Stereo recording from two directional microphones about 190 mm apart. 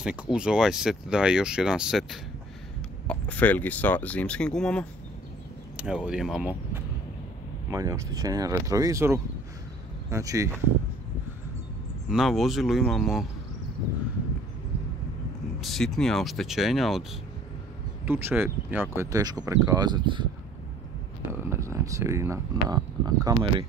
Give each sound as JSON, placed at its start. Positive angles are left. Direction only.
{"t": 0.0, "sound": "speech", "side_deg": -5}
{"t": 7.7, "sound": "speech", "side_deg": -15}
{"t": 12.1, "sound": "speech", "side_deg": 0}
{"t": 15.6, "sound": "speech", "side_deg": 0}
{"t": 18.0, "sound": "speech", "side_deg": -10}
{"t": 21.3, "sound": "speech", "side_deg": -15}